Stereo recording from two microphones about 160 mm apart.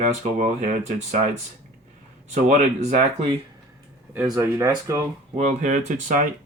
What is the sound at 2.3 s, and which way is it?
Speech, 50° right (ahead or behind).